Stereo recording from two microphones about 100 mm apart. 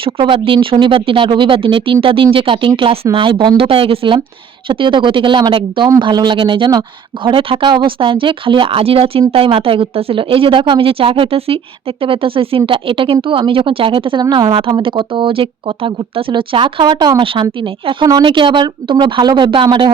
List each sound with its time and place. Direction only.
0.0 s speech: 60° right (ahead or behind)
3.6 s a woman's voice: 65° right (ahead or behind)
14.2 s a woman's voice: 45° right (ahead or behind)